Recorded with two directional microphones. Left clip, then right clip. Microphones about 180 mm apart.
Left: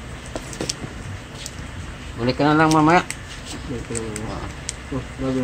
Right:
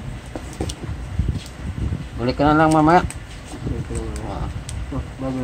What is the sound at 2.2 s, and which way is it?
Speech, 25° right (ahead or behind).